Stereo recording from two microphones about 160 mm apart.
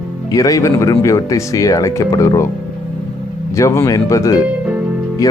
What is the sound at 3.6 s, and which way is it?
Speech, 20° left (ahead or behind).